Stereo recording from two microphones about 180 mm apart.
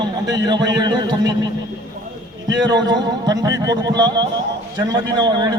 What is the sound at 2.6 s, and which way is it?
A man's voice, 25° right (ahead or behind).